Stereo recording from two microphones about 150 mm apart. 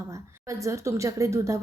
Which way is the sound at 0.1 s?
20° right (ahead or behind).